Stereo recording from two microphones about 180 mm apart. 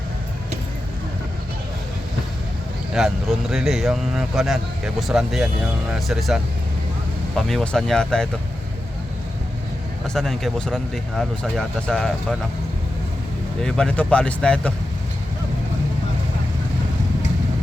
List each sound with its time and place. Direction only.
2.9 s speech: centre (ahead or behind)
10.2 s speech: centre (ahead or behind)
13.6 s speech: 5° left (ahead or behind)